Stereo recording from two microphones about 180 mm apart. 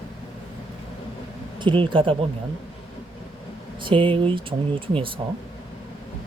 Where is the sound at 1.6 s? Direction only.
25° right (ahead or behind).